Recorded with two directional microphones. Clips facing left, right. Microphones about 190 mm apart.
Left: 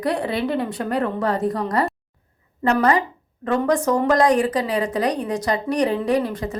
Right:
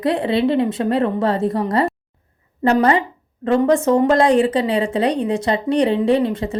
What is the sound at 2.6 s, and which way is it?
A woman's voice, 30° right (ahead or behind).